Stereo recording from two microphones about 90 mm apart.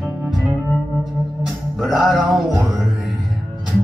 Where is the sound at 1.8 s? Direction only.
Centre (ahead or behind).